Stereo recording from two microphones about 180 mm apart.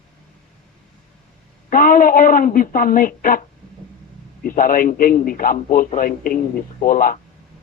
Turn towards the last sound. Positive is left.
turn(degrees=50)  # may be behind; listen again after turning